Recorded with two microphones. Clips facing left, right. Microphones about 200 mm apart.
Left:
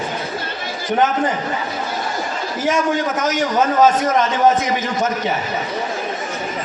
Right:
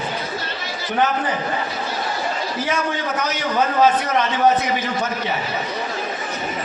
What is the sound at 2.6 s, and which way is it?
A man's voice, 45° left (ahead or behind).